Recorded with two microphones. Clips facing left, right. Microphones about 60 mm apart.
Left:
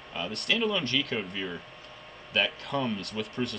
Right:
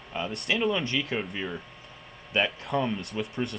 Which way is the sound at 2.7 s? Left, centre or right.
Centre.